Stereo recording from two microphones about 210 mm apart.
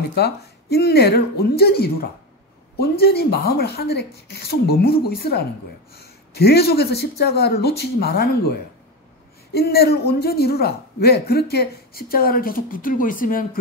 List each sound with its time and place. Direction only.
0.1 s speech: 50° left (ahead or behind)